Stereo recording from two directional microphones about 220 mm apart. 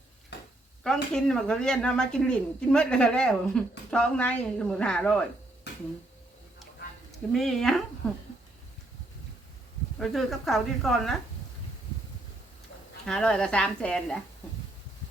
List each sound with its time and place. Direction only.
1.1 s a woman's voice: 5° left (ahead or behind)
5.7 s a sound: 50° left (ahead or behind)
7.3 s a woman's voice: centre (ahead or behind)
10.0 s a woman's voice: centre (ahead or behind)
13.1 s a woman's voice: 5° left (ahead or behind)